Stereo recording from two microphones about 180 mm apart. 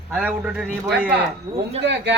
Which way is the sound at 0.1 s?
5° right (ahead or behind).